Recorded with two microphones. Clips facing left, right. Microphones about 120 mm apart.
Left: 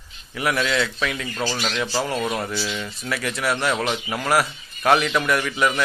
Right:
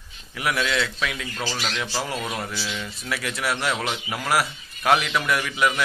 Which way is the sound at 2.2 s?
5° left (ahead or behind).